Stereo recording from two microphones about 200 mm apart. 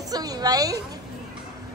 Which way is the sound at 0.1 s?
20° right (ahead or behind).